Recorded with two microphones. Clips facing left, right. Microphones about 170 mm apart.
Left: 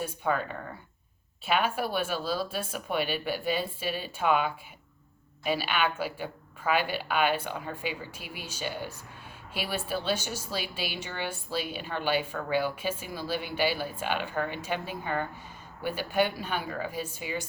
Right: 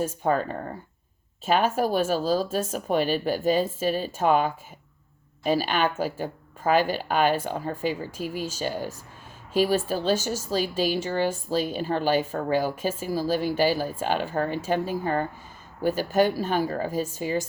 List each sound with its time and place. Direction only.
0.0 s speech: 40° right (ahead or behind)